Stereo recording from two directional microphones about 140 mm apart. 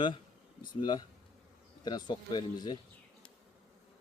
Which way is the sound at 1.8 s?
30° left (ahead or behind).